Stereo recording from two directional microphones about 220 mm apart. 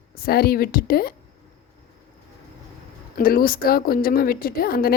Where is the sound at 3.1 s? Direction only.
40° left (ahead or behind).